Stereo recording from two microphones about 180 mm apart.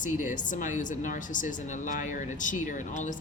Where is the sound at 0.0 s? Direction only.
45° left (ahead or behind).